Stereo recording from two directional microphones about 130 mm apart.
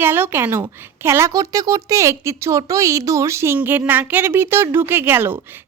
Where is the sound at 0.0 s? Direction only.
15° right (ahead or behind).